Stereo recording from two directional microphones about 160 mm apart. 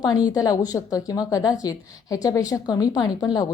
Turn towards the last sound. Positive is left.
turn(degrees=25)  # may be behind; listen again after turning